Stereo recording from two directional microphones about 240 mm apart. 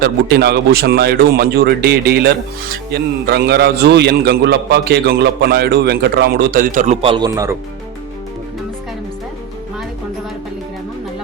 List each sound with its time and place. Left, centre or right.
0.0 s a man's voice: right; by 7.5 s centre